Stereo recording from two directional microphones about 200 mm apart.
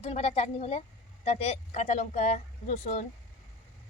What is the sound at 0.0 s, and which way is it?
A woman's voice, 30° left (ahead or behind).